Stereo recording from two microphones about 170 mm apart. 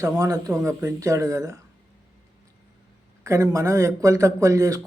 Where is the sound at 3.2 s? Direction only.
20° right (ahead or behind).